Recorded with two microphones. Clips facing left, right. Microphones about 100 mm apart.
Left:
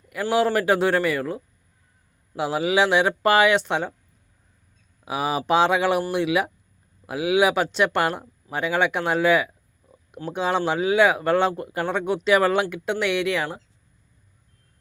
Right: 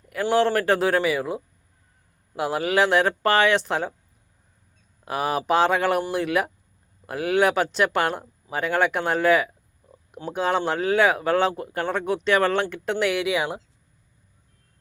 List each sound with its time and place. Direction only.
0.1 s speech: 5° left (ahead or behind)
5.0 s speech: centre (ahead or behind)